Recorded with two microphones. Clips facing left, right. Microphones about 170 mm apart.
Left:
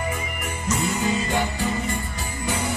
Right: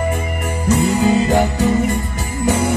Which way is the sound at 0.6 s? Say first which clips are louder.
Right 9 dB; 40° right (ahead or behind).